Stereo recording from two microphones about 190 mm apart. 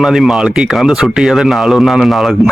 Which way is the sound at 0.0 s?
Centre (ahead or behind).